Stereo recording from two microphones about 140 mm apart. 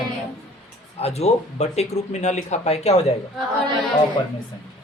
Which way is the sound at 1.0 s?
50° left (ahead or behind).